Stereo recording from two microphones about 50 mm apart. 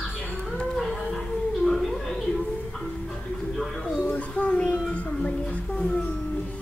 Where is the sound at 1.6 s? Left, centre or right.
Centre.